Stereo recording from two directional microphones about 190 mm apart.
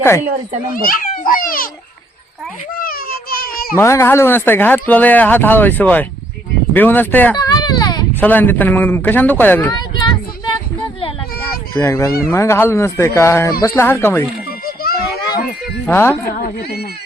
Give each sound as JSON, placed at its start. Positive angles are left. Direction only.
{"t": 0.7, "sound": "a child's voice", "side_deg": 50}
{"t": 2.7, "sound": "a child's voice", "side_deg": 50}
{"t": 3.8, "sound": "speech", "side_deg": 15}
{"t": 7.3, "sound": "baby cry", "side_deg": 20}
{"t": 8.1, "sound": "speech", "side_deg": 10}
{"t": 9.7, "sound": "a sound", "side_deg": 25}
{"t": 12.2, "sound": "speech", "side_deg": 15}
{"t": 14.6, "sound": "music", "side_deg": 50}
{"t": 15.9, "sound": "speech", "side_deg": 10}
{"t": 16.4, "sound": "speech", "side_deg": 55}